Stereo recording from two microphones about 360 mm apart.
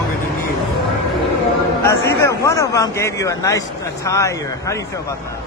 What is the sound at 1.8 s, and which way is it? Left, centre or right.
A man's voice, centre.